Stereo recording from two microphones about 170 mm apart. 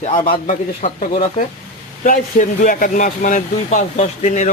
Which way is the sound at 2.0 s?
50° left (ahead or behind).